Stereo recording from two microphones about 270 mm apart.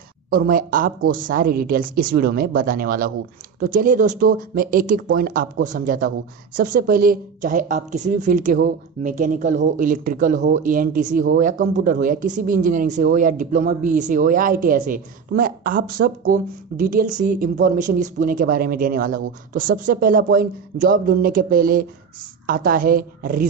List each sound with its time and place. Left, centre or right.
0.3 s speech: right